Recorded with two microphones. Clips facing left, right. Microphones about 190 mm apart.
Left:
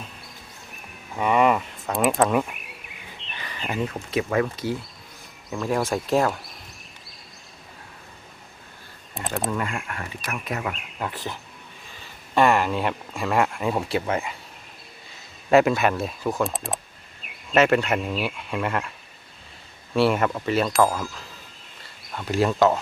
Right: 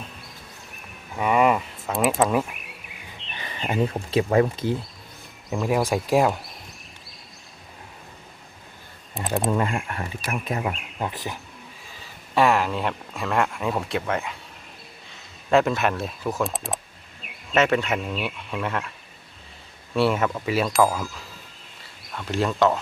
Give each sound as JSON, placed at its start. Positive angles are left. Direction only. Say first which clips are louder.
{"t": 1.2, "sound": "a sound", "louder": "even", "side_deg": -5}
{"t": 3.3, "sound": "bird", "louder": "right 2 dB", "side_deg": -25}
{"t": 3.8, "sound": "speech", "louder": "right 3 dB", "side_deg": -30}
{"t": 5.7, "sound": "speech", "louder": "right 1 dB", "side_deg": -10}
{"t": 9.2, "sound": "a sound", "louder": "right 1 dB", "side_deg": 0}
{"t": 9.5, "sound": "speech", "louder": "right 4 dB", "side_deg": -30}
{"t": 10.8, "sound": "a sound", "louder": "right 1 dB", "side_deg": 0}
{"t": 11.0, "sound": "speech", "louder": "right 1 dB", "side_deg": -15}
{"t": 12.3, "sound": "speech", "louder": "left 1 dB", "side_deg": 0}
{"t": 15.4, "sound": "speech", "louder": "left 2 dB", "side_deg": 5}
{"t": 20.0, "sound": "speech", "louder": "left 1 dB", "side_deg": 0}